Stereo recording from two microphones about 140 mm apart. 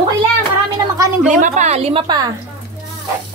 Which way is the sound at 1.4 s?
55° right (ahead or behind).